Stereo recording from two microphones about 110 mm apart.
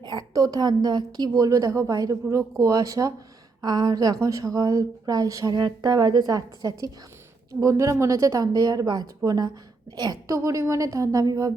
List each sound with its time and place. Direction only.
0.0 s a woman's voice: 40° right (ahead or behind)